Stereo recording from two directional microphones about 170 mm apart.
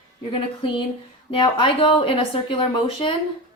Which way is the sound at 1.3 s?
30° left (ahead or behind).